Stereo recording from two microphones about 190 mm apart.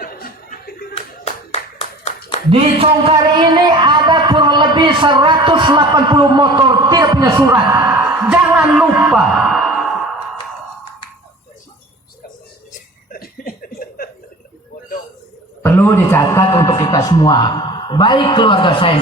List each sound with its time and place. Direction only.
0.0 s chuckle: 50° left (ahead or behind)
1.2 s clapping: 35° left (ahead or behind)
2.5 s speech: 30° right (ahead or behind); by 9.9 s centre (ahead or behind)
13.1 s chuckle: 50° left (ahead or behind)
15.6 s a man's voice: 10° left (ahead or behind)